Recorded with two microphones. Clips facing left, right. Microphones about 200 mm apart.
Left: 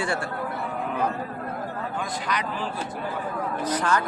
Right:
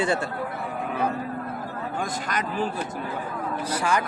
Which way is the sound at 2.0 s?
45° right (ahead or behind).